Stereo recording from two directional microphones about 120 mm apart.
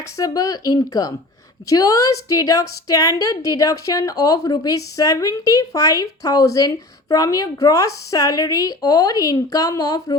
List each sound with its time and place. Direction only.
0.2 s a woman's voice: 30° left (ahead or behind)